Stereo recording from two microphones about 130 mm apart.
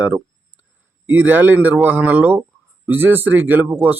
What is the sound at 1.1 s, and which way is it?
Speech, 15° right (ahead or behind).